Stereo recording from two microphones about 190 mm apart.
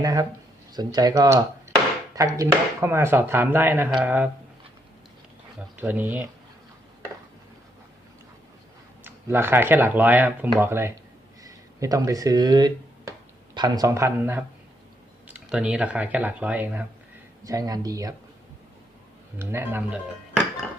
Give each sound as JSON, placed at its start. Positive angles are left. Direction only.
{"t": 0.0, "sound": "speech", "side_deg": -20}
{"t": 5.7, "sound": "speech", "side_deg": -10}
{"t": 9.0, "sound": "speech", "side_deg": -10}
{"t": 17.4, "sound": "speech", "side_deg": -20}
{"t": 19.4, "sound": "speech", "side_deg": -10}